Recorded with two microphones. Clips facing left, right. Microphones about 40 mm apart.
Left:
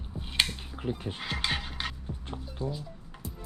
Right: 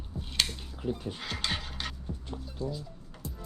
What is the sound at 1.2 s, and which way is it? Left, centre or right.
Music, centre.